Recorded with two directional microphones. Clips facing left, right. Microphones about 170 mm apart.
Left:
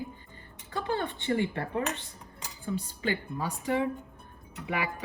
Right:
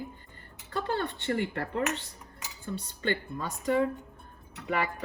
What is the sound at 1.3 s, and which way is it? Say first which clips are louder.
Speech: left 3 dB; 65° right (ahead or behind).